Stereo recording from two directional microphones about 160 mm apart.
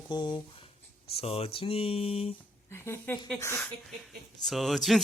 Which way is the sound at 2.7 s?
15° left (ahead or behind).